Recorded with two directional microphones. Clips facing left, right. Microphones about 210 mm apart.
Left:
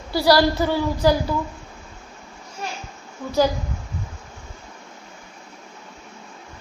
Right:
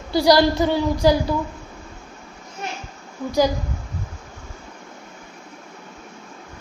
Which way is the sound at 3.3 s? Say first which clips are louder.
Right 1 dB; 15° right (ahead or behind).